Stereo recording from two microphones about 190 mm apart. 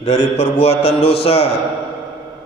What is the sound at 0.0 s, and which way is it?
A man's voice, 35° left (ahead or behind).